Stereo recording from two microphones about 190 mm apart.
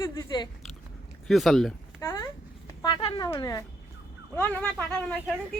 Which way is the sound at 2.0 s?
15° left (ahead or behind).